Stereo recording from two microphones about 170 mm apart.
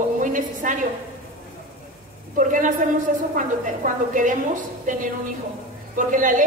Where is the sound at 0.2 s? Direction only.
50° right (ahead or behind).